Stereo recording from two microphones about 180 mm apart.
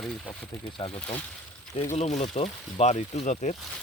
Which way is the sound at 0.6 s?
30° left (ahead or behind).